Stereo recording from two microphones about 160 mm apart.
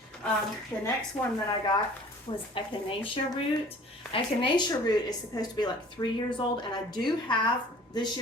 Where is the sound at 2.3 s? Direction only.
30° left (ahead or behind).